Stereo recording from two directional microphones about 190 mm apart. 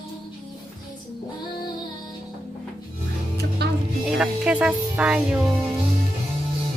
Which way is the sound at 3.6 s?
60° right (ahead or behind).